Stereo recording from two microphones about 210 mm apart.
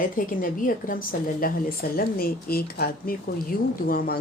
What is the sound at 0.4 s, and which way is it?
A woman's voice, 40° left (ahead or behind).